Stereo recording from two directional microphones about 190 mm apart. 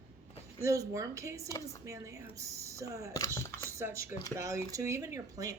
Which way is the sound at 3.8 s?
15° right (ahead or behind).